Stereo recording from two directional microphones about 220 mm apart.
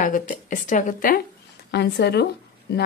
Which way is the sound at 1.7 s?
50° left (ahead or behind).